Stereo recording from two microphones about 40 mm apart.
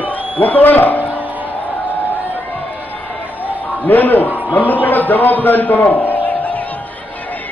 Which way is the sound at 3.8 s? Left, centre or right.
Left.